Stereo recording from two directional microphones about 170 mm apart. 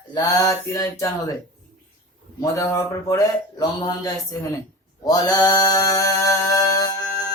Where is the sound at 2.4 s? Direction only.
20° left (ahead or behind).